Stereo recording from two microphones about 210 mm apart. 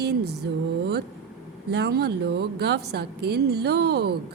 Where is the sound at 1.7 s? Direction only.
50° right (ahead or behind).